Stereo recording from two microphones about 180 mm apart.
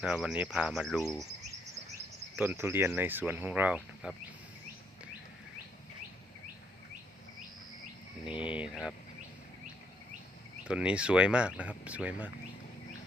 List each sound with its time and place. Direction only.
0.0 s speech: 5° right (ahead or behind)
2.3 s speech: 10° right (ahead or behind)
8.2 s a sound: 30° left (ahead or behind)
8.7 s speech: 5° right (ahead or behind)
10.7 s speech: 5° right (ahead or behind)